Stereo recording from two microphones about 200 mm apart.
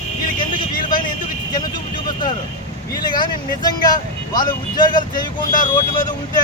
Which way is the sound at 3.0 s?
20° left (ahead or behind).